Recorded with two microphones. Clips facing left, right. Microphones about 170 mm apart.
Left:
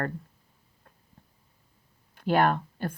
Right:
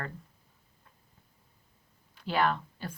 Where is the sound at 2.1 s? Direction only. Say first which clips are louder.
Left 5 dB; 50° left (ahead or behind).